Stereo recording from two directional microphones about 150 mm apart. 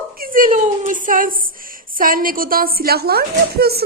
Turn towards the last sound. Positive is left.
turn(degrees=-90)